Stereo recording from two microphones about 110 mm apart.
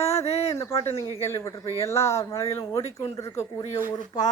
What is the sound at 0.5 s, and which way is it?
Speech, 25° left (ahead or behind).